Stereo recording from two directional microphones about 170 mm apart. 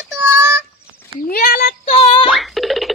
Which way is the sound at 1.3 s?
60° left (ahead or behind).